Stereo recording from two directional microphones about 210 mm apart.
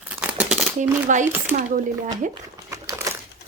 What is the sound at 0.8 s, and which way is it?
Speech, 35° right (ahead or behind).